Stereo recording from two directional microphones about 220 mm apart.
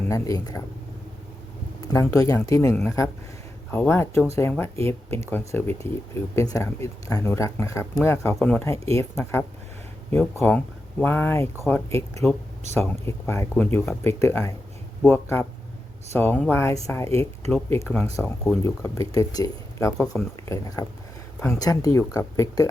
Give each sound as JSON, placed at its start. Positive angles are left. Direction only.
{"t": 0.1, "sound": "speech", "side_deg": 15}
{"t": 1.8, "sound": "speech", "side_deg": 15}